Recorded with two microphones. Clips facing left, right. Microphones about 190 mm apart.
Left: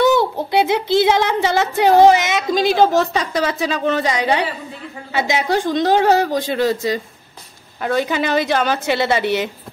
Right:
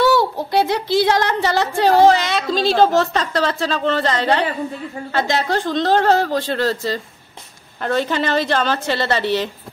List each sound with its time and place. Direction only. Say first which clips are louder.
0.0 s speech: left 1 dB; 20° left (ahead or behind)